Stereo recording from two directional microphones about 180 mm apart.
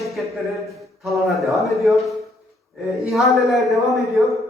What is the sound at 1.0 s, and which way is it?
A woman's voice, centre (ahead or behind).